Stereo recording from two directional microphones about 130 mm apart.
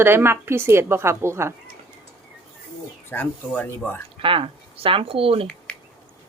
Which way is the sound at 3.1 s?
15° left (ahead or behind).